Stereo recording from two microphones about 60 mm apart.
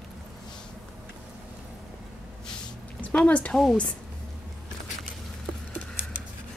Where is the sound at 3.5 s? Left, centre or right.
Centre.